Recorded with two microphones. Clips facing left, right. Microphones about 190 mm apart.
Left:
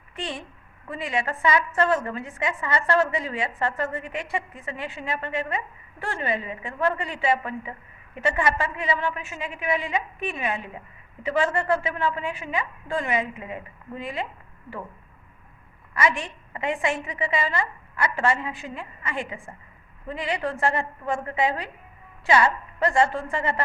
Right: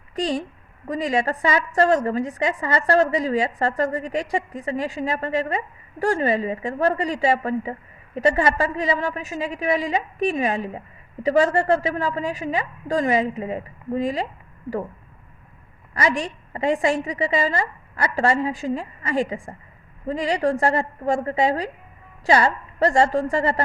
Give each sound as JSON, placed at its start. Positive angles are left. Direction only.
{"t": 0.2, "sound": "a woman's voice", "side_deg": -40}
{"t": 16.0, "sound": "a woman's voice", "side_deg": -35}